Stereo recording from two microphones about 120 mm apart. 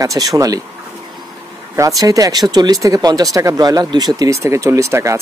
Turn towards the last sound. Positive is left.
turn(degrees=-25)  # may be behind; listen again after turning